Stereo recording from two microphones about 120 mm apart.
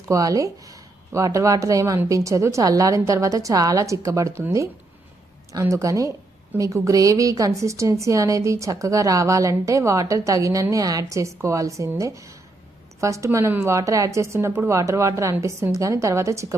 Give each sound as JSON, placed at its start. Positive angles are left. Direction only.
{"t": 0.1, "sound": "a woman's voice", "side_deg": -30}